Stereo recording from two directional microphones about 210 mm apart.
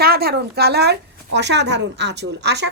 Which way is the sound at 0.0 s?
45° right (ahead or behind).